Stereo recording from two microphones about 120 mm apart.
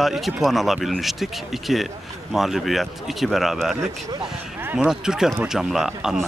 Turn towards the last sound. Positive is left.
turn(degrees=-5)  # may be behind; listen again after turning